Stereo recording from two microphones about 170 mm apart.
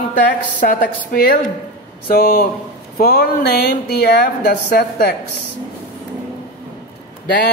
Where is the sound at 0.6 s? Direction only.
60° left (ahead or behind).